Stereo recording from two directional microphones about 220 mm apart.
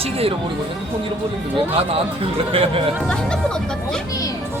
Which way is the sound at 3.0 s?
5° left (ahead or behind).